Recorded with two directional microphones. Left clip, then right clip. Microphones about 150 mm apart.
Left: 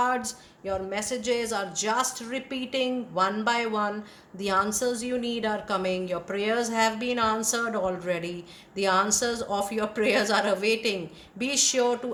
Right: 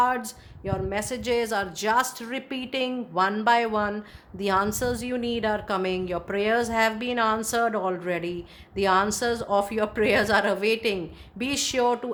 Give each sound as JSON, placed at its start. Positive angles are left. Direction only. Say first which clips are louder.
{"t": 0.0, "sound": "a woman's voice", "louder": "right 2 dB", "side_deg": -55}